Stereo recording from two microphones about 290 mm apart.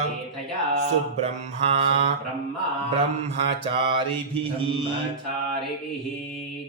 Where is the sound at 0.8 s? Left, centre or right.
Right.